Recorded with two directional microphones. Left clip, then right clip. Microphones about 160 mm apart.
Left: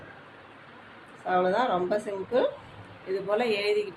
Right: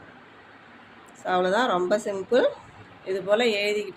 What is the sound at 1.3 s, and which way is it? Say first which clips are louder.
A woman's voice: right 2 dB; 50° right (ahead or behind).